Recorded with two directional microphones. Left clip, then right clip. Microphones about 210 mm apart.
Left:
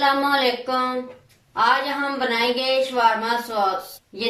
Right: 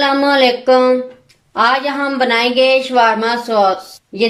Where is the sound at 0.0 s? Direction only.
50° right (ahead or behind).